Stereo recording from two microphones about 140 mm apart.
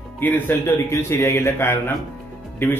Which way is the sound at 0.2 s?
15° left (ahead or behind).